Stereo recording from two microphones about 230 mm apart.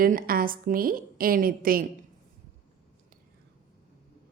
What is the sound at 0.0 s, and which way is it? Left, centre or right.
A woman's voice, right.